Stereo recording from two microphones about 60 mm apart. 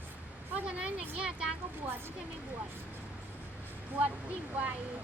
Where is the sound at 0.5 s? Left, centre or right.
Centre.